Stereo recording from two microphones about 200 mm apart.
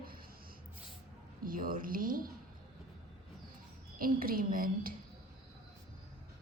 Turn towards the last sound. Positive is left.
turn(degrees=-45)  # may be behind; listen again after turning